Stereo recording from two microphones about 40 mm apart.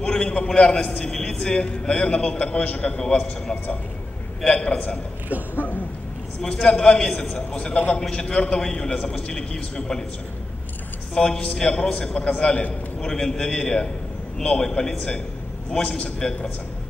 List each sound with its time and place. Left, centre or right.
0.0 s a man's voice: left
2.9 s a man's voice: left
4.5 s a man's voice: left
6.6 s a man's voice: left
8.9 s a man's voice: left
9.3 s a man's voice: left
11.1 s a man's voice: left
13.0 s a man's voice: centre
15.0 s a man's voice: left